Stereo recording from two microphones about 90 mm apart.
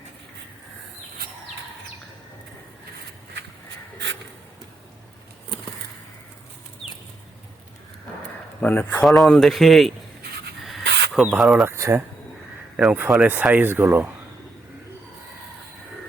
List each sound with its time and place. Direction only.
8.6 s speech: 25° left (ahead or behind)
9.0 s speech: centre (ahead or behind)
10.7 s a sound: centre (ahead or behind)
11.3 s speech: 5° right (ahead or behind)
11.6 s speech: 35° right (ahead or behind)
12.7 s speech: 10° right (ahead or behind)